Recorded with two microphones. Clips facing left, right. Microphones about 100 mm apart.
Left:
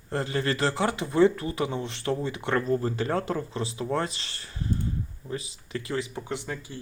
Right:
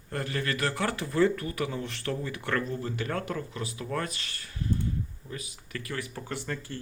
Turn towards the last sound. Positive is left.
turn(degrees=10)  # may be behind; listen again after turning